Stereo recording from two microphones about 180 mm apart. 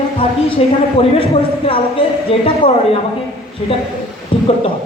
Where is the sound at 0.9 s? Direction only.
30° left (ahead or behind).